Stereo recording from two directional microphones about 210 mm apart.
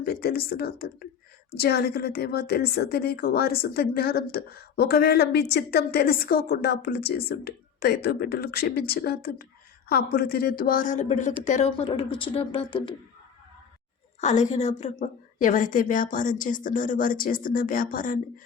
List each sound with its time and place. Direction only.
0.0 s a woman's voice: 45° left (ahead or behind); by 12.9 s 25° left (ahead or behind)
14.2 s a woman's voice: 35° left (ahead or behind)